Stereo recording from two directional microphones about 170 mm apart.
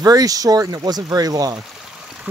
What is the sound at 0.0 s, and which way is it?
Speech, 20° right (ahead or behind).